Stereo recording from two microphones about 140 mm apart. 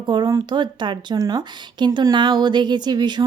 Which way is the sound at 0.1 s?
30° right (ahead or behind).